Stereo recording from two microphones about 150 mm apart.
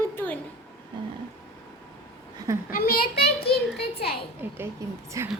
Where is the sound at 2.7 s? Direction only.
90° left.